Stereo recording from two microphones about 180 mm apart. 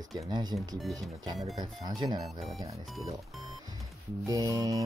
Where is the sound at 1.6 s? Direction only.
25° right (ahead or behind).